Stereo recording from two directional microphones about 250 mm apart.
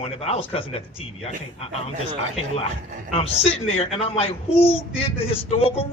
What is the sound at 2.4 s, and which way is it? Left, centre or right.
A man's voice, left.